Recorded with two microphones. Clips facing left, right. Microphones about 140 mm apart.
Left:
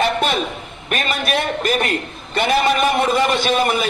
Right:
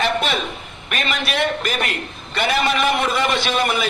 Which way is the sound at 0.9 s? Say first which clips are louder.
Left 3 dB; 40° left (ahead or behind).